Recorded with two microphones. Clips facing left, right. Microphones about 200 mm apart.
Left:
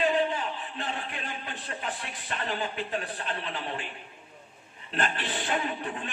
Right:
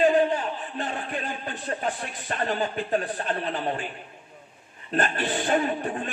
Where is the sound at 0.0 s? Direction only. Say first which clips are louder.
Right 6 dB; 45° right (ahead or behind).